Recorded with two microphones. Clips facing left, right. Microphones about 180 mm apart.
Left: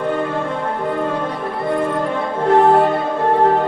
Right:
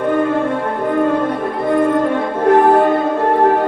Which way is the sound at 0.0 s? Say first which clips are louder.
Right 5 dB; 55° right (ahead or behind).